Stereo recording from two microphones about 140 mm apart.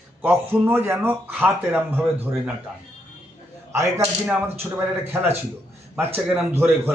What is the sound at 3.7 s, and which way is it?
Speech, 20° right (ahead or behind).